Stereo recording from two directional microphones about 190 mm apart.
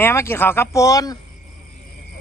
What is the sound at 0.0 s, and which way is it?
A man's voice, 15° left (ahead or behind).